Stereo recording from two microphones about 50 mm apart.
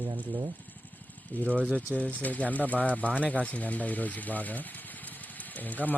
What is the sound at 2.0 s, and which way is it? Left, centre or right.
Speech, left.